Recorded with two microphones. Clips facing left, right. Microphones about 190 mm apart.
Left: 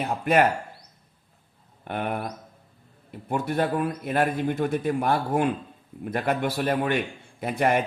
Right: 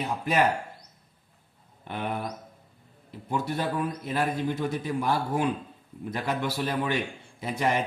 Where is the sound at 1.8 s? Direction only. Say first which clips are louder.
Left 3 dB; 55° left (ahead or behind).